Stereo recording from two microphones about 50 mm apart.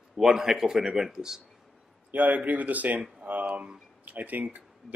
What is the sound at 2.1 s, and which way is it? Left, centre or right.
Speech, right.